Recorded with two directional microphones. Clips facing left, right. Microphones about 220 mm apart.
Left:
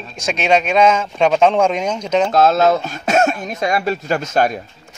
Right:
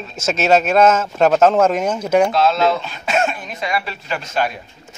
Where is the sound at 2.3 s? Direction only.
45° left (ahead or behind).